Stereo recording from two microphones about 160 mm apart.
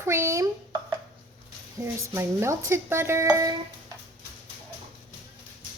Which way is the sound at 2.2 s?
15° right (ahead or behind).